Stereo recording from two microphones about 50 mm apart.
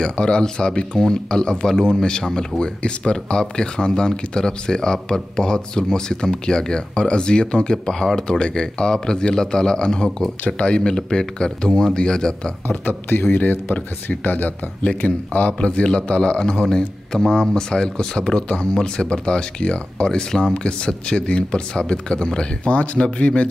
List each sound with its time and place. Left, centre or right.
0.0 s speech: centre
12.6 s speech: left